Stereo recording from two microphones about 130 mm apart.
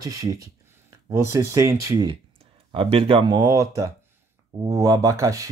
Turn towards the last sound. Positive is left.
turn(degrees=-25)  # may be behind; listen again after turning